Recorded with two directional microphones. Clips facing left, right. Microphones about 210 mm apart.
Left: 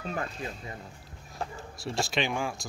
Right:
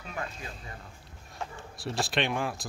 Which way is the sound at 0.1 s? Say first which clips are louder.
Left 2 dB; 35° left (ahead or behind).